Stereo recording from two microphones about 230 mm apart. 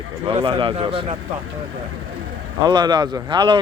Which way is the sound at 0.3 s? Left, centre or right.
Right.